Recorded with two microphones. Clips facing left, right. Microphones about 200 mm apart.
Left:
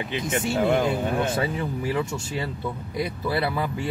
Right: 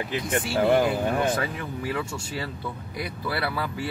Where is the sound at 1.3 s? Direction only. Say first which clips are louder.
Left 3 dB; 25° left (ahead or behind).